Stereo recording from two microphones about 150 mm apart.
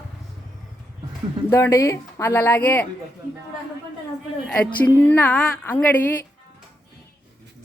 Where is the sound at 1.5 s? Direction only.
15° left (ahead or behind).